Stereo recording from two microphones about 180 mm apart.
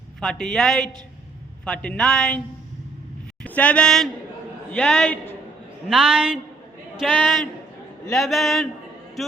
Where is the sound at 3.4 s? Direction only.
10° left (ahead or behind).